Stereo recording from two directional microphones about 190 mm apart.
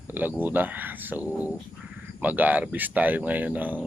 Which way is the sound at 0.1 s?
10° right (ahead or behind).